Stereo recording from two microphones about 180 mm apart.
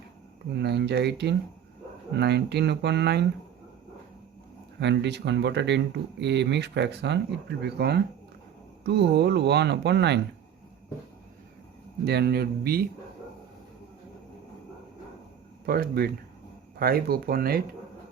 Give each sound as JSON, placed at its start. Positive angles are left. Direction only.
{"t": 0.5, "sound": "speech", "side_deg": -70}
{"t": 4.8, "sound": "speech", "side_deg": -70}
{"t": 12.0, "sound": "speech", "side_deg": -65}
{"t": 15.6, "sound": "speech", "side_deg": -55}